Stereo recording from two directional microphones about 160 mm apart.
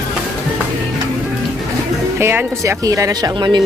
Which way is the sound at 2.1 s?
15° right (ahead or behind).